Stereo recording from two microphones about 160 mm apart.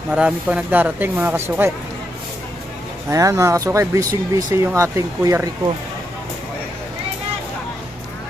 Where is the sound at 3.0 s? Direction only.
20° right (ahead or behind).